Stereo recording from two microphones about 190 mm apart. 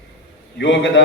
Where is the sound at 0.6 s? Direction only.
75° left (ahead or behind).